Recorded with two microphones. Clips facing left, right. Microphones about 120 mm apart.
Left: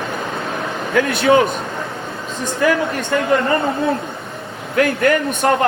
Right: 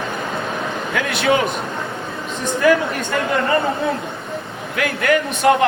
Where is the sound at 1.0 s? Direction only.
40° left (ahead or behind).